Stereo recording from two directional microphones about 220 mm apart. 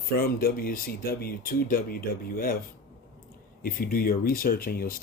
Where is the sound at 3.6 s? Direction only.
40° left (ahead or behind).